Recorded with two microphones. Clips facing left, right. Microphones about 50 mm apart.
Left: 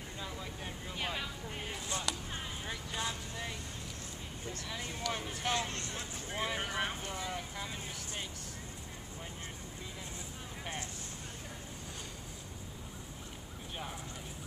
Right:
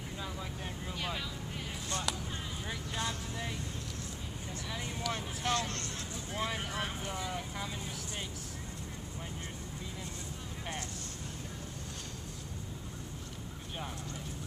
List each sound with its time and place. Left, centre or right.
0.2 s vehicle: centre
0.9 s vehicle: centre
1.7 s a sound: centre
2.6 s vehicle: centre
5.1 s speech: centre
5.4 s speech: centre
7.2 s speech: centre